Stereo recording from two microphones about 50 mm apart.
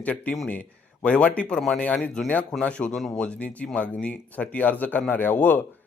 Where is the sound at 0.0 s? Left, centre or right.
Left.